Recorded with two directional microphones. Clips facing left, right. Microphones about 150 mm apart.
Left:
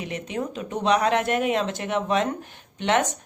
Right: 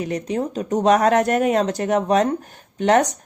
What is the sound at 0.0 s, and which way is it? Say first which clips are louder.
A woman's voice: right 6 dB; 40° right (ahead or behind).